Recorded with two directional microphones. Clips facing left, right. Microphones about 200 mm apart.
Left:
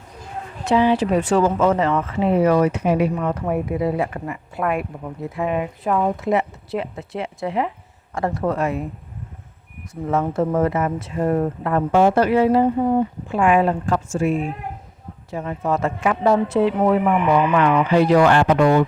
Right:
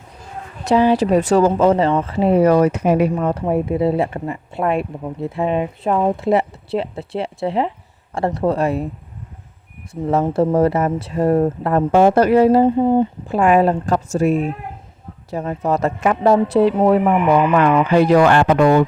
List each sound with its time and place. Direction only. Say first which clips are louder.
0.6 s speech: right 3 dB; 40° right (ahead or behind)
3.2 s speech: right 4 dB; 35° right (ahead or behind)
9.9 s speech: right 4 dB; 35° right (ahead or behind)
12.7 s speech: right 3 dB; 25° right (ahead or behind); by 18.9 s 45° right (ahead or behind)